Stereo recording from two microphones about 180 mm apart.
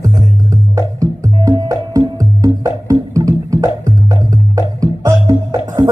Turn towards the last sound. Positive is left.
turn(degrees=-20)  # may be behind; listen again after turning